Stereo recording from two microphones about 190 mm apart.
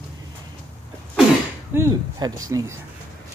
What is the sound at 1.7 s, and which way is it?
Speech, 15° right (ahead or behind).